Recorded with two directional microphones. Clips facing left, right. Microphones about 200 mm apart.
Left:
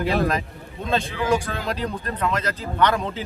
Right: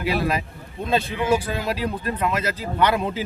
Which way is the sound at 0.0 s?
5° right (ahead or behind).